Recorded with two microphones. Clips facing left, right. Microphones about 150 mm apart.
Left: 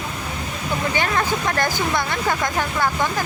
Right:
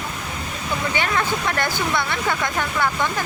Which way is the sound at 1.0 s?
40° left (ahead or behind).